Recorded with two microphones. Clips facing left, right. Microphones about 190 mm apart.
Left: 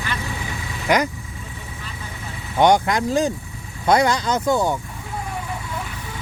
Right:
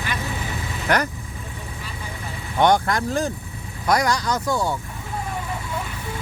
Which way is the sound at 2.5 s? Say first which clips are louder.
Left 2 dB; 15° left (ahead or behind).